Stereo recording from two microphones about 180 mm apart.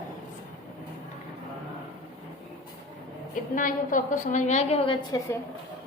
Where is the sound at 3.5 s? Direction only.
50° left (ahead or behind).